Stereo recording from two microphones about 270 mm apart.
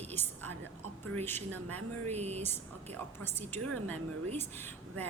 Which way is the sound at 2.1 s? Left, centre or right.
Right.